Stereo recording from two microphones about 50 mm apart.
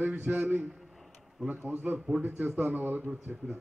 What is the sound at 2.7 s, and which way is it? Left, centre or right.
Speech, right.